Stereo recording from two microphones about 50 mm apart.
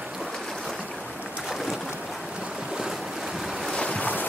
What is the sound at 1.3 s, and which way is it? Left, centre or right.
Boat, centre.